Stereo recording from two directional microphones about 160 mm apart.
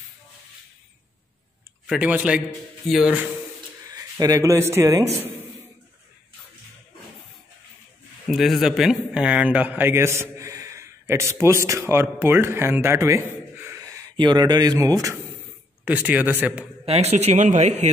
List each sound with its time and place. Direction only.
1.9 s a man's voice: 10° right (ahead or behind)
3.9 s speech: 20° right (ahead or behind)
8.3 s a man's voice: centre (ahead or behind); by 15.1 s 20° right (ahead or behind)
15.8 s a man's voice: 10° right (ahead or behind)
16.8 s speech: 40° right (ahead or behind)